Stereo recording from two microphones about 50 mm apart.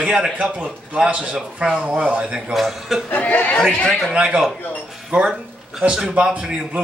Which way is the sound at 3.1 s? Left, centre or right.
Left.